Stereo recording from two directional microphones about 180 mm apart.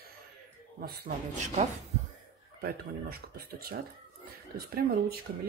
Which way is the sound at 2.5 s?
55° right (ahead or behind).